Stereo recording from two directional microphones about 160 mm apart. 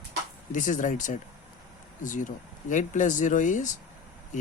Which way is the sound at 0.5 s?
50° left (ahead or behind).